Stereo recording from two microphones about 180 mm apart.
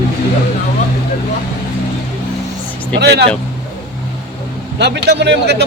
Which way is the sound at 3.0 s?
65° right (ahead or behind).